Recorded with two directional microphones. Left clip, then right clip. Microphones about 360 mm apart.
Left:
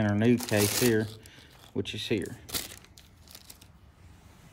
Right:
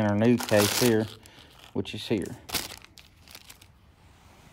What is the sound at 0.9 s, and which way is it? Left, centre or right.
Speech, centre.